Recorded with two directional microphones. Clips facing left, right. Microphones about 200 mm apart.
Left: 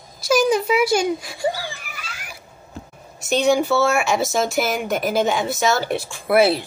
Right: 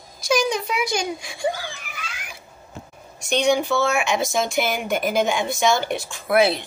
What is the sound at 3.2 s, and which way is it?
Speech, 5° left (ahead or behind).